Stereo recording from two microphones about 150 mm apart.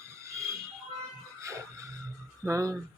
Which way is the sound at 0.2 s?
20° right (ahead or behind).